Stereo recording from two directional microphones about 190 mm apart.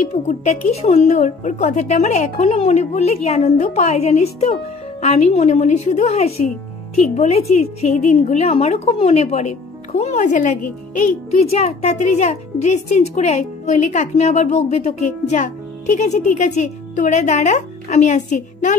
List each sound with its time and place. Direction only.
0.0 s speech: 40° left (ahead or behind)